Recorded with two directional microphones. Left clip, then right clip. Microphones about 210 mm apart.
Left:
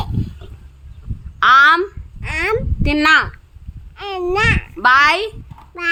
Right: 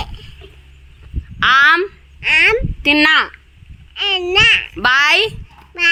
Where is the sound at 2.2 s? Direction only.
10° left (ahead or behind).